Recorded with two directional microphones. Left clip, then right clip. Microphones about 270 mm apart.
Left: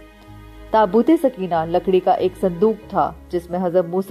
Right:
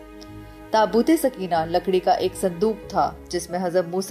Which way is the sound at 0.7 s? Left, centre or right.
Left.